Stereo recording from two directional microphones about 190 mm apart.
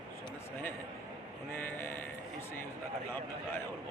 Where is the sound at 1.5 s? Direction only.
10° left (ahead or behind).